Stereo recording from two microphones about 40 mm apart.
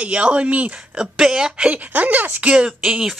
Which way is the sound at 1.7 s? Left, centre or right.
Right.